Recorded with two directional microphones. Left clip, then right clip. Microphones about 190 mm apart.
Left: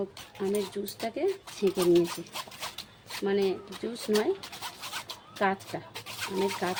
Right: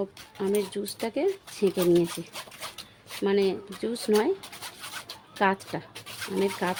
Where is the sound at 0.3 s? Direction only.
50° right (ahead or behind).